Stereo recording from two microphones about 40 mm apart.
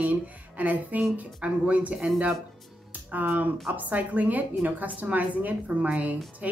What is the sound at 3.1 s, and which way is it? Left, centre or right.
A woman's voice, right.